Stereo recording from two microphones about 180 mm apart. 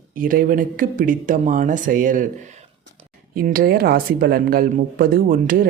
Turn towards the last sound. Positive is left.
turn(degrees=-50)  # may be behind; listen again after turning